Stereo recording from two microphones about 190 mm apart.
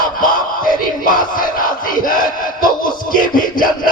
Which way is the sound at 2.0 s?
50° left (ahead or behind).